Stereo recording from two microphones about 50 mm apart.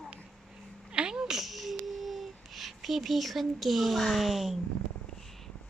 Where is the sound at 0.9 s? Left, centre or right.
Centre.